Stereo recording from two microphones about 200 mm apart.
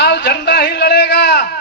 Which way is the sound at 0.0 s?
55° left (ahead or behind).